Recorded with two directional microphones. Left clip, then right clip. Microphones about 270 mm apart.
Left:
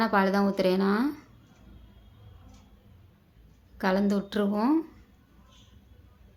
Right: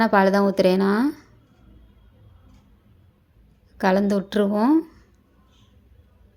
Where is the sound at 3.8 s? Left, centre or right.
Right.